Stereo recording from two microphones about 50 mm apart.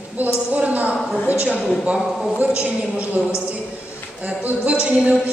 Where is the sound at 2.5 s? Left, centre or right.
Right.